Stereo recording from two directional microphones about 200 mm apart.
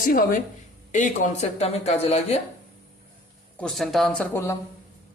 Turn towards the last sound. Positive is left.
turn(degrees=10)  # may be behind; listen again after turning